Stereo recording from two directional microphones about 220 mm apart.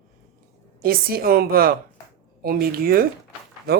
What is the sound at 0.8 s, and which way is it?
Speech, 40° right (ahead or behind).